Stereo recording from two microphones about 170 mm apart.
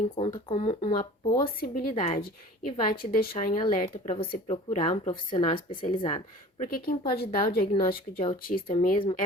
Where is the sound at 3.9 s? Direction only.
35° left (ahead or behind).